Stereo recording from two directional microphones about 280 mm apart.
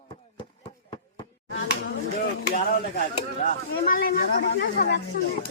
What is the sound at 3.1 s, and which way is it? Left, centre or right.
Speech, left.